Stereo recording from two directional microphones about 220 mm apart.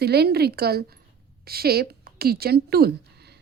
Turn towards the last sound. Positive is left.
turn(degrees=-45)  # may be behind; listen again after turning